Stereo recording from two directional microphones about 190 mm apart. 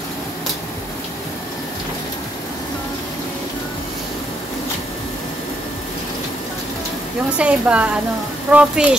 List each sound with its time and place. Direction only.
7.3 s a woman's voice: 5° right (ahead or behind)